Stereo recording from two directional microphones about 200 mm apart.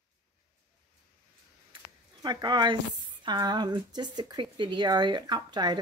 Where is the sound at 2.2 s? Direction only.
20° right (ahead or behind).